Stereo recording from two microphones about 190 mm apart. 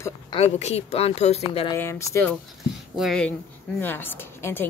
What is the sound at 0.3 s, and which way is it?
Speech, 35° left (ahead or behind).